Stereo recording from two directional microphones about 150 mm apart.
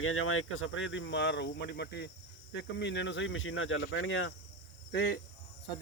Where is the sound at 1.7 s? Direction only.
90° left.